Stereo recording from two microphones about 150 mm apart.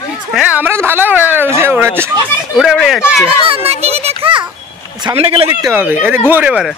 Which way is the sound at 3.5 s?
40° right (ahead or behind).